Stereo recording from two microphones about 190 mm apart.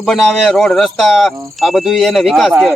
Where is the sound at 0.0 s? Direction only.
Centre (ahead or behind).